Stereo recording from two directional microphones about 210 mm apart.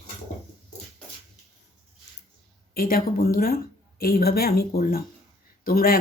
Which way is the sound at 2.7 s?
45° left (ahead or behind).